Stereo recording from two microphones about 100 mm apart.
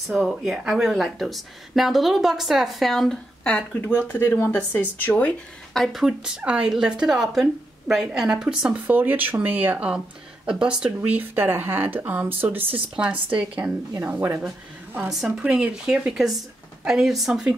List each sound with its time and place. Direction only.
0.1 s speech: 5° right (ahead or behind)
3.8 s speech: 25° left (ahead or behind)
5.7 s speech: centre (ahead or behind)
11.1 s speech: 20° right (ahead or behind)
15.0 s speech: 5° right (ahead or behind)